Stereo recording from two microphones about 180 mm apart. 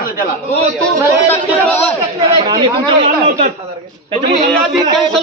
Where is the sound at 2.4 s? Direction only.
25° right (ahead or behind).